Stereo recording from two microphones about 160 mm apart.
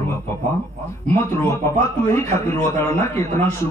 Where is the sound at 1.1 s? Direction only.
15° left (ahead or behind).